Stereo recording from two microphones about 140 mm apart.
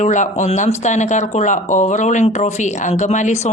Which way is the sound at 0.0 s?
60° left (ahead or behind).